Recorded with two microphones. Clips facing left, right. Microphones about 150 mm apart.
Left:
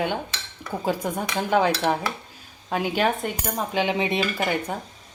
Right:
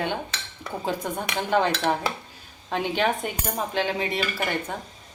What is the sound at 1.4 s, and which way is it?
Speech, 10° left (ahead or behind).